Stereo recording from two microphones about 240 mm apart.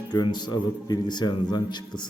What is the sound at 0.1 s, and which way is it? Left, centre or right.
A man's voice, centre.